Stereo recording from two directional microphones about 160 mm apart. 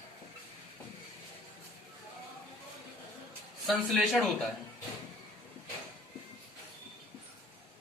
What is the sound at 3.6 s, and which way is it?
Speech, centre (ahead or behind).